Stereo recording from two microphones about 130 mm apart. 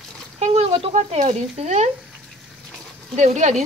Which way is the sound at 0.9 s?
60° right (ahead or behind).